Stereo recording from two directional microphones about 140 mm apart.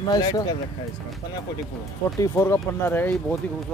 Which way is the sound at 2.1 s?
20° left (ahead or behind).